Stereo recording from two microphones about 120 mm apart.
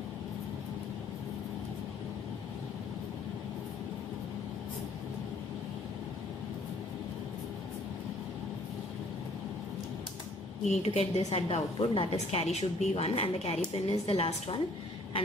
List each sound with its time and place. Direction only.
10.7 s a woman's voice: 60° left (ahead or behind)